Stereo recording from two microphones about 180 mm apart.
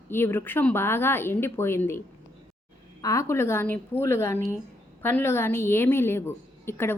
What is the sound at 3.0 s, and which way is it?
A woman's voice, 20° left (ahead or behind).